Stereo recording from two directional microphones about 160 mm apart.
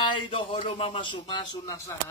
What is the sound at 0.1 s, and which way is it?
Speech, 35° left (ahead or behind).